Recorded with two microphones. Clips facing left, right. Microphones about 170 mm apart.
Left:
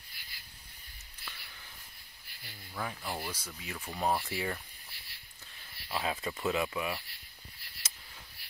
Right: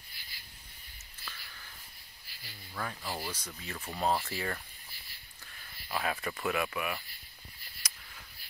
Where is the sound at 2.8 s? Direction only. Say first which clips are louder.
Even; 10° left (ahead or behind).